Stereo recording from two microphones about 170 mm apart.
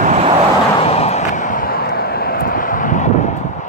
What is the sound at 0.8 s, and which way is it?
Vehicle, 40° left (ahead or behind).